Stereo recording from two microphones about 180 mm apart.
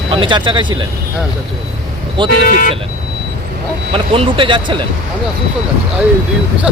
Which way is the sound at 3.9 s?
30° right (ahead or behind).